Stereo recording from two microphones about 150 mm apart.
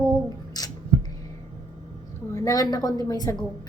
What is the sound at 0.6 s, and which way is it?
Scissors, 25° left (ahead or behind).